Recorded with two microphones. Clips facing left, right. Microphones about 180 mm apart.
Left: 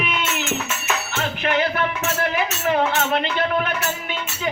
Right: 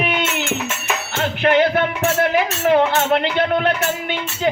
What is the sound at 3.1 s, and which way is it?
Music, 65° right (ahead or behind).